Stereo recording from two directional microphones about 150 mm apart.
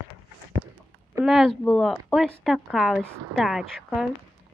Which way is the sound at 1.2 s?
Centre (ahead or behind).